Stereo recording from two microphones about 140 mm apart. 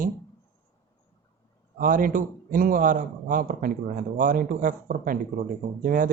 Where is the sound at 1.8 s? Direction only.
85° right.